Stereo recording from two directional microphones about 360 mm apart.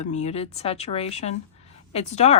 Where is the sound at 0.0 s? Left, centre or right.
Centre.